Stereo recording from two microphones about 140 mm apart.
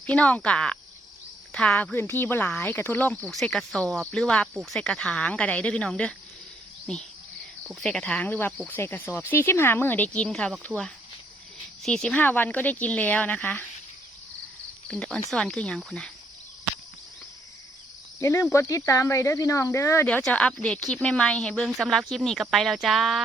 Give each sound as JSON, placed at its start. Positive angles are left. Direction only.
{"t": 0.0, "sound": "a woman's voice", "side_deg": 10}
{"t": 11.8, "sound": "speech", "side_deg": 5}
{"t": 14.8, "sound": "a woman's voice", "side_deg": 5}
{"t": 18.2, "sound": "speech", "side_deg": 20}
{"t": 20.1, "sound": "a woman's voice", "side_deg": 10}